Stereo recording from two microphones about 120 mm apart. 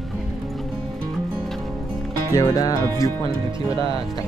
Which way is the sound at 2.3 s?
30° left (ahead or behind).